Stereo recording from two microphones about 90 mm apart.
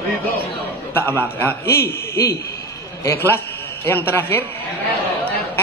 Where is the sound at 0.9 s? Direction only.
25° left (ahead or behind).